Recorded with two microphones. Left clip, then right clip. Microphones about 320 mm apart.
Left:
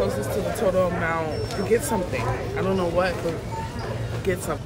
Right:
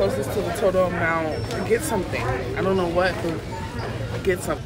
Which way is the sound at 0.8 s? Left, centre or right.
Centre.